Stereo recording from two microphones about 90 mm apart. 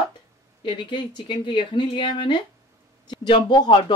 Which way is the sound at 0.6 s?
65° left (ahead or behind).